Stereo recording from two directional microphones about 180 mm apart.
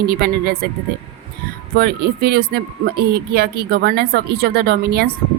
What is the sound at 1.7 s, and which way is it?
A woman's voice, 60° right (ahead or behind).